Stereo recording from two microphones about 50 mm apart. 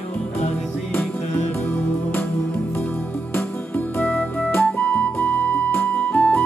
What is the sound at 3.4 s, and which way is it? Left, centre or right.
Music, left.